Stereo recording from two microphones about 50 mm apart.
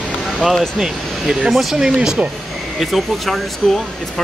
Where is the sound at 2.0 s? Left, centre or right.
Right.